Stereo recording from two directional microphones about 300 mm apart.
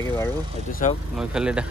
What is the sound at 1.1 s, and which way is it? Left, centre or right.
Speech, centre.